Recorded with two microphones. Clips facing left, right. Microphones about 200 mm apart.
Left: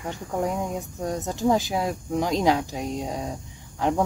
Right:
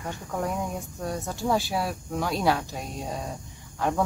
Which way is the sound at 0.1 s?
20° left (ahead or behind).